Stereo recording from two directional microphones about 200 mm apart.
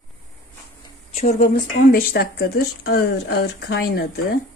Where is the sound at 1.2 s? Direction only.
40° left (ahead or behind).